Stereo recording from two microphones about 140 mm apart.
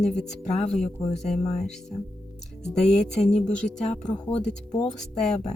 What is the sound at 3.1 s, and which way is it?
Speech, 55° left (ahead or behind).